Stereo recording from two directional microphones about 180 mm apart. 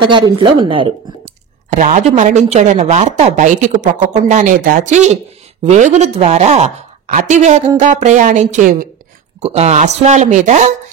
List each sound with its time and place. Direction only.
0.1 s a woman's voice: 25° right (ahead or behind)
1.7 s speech: 40° right (ahead or behind)